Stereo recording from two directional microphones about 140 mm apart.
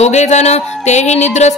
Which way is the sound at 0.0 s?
55° left (ahead or behind).